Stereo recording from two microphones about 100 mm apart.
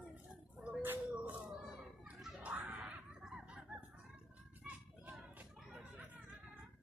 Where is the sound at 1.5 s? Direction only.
5° right (ahead or behind).